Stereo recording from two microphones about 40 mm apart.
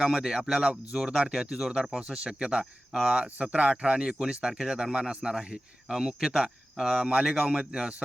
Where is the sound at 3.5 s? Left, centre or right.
Right.